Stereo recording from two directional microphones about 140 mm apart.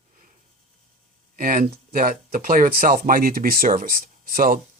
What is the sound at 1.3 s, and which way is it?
Speech, 90° right.